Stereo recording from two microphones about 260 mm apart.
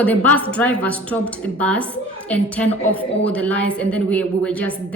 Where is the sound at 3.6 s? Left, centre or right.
Right.